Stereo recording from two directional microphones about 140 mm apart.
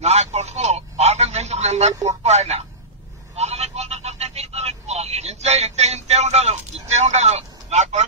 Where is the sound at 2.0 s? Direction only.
50° right (ahead or behind).